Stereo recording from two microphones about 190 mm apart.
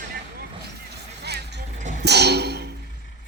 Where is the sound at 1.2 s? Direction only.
60° right (ahead or behind).